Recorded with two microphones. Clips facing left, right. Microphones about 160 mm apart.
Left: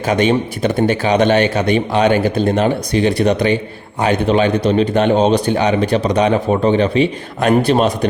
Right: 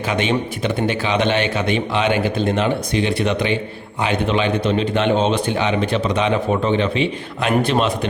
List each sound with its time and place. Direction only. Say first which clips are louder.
0.1 s a man's voice: left 6 dB; 40° left (ahead or behind)